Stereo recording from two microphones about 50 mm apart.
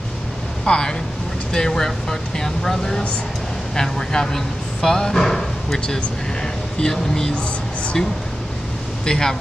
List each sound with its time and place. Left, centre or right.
0.7 s speech: centre
9.0 s speech: centre